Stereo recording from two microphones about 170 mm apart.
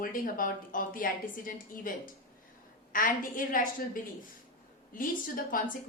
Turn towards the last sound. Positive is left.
turn(degrees=55)  # may be behind; listen again after turning